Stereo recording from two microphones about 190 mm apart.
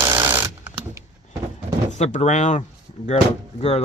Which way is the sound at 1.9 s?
40° left (ahead or behind).